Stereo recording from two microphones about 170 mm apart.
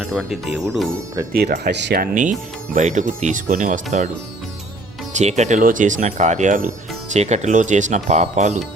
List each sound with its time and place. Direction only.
0.0 s speech: centre (ahead or behind)
1.3 s speech: 65° right (ahead or behind); by 3.8 s 50° right (ahead or behind)
5.1 s speech: 45° right (ahead or behind)